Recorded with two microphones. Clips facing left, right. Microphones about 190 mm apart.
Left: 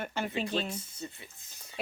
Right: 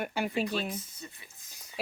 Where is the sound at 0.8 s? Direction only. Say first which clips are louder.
Left 3 dB; 30° left (ahead or behind).